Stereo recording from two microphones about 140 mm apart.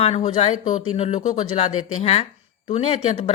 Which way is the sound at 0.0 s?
45° left (ahead or behind).